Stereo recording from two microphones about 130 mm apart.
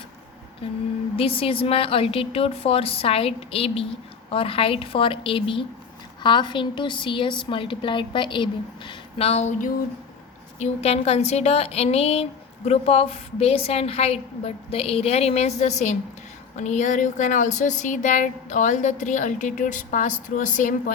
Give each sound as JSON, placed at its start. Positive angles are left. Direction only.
{"t": 1.1, "sound": "a woman's voice", "side_deg": 45}
{"t": 10.6, "sound": "a woman's voice", "side_deg": 50}